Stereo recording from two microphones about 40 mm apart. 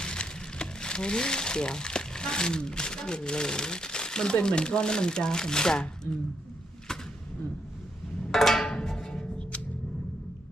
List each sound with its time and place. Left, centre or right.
0.0 s speech: left
8.3 s music: centre; by 9.6 s left